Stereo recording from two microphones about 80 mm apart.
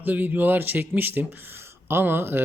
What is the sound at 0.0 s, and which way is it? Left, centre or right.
Speech, right.